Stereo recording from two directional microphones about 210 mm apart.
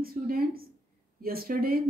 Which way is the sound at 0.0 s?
45° right (ahead or behind).